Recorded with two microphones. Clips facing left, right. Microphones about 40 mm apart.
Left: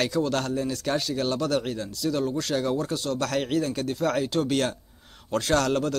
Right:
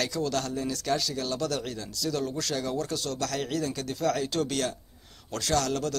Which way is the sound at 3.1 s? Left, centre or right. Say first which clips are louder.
Left 6 dB; left.